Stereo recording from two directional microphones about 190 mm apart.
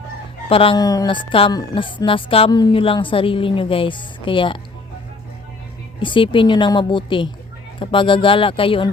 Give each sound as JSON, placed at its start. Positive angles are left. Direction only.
{"t": 0.4, "sound": "speech", "side_deg": 30}
{"t": 6.0, "sound": "speech", "side_deg": 25}